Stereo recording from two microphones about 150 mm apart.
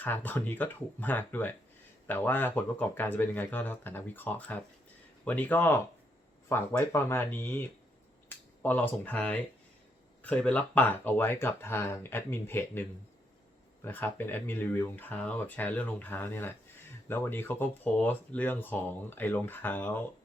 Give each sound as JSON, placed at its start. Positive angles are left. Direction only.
{"t": 0.0, "sound": "speech", "side_deg": 10}